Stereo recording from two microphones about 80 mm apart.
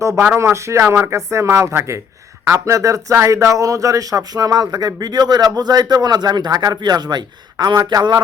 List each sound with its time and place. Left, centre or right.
0.3 s speech: right